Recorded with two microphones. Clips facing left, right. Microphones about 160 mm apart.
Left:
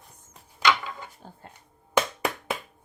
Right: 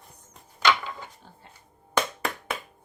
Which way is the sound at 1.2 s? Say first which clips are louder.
Left 5 dB; 45° left (ahead or behind).